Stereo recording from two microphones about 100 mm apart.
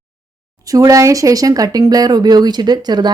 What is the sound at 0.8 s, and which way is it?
Speech, 35° right (ahead or behind).